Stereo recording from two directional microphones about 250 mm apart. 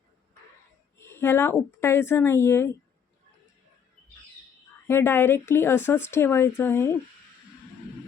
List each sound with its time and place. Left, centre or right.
0.9 s speech: centre
4.9 s speech: centre